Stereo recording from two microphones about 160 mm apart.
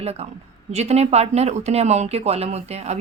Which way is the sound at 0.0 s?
40° right (ahead or behind).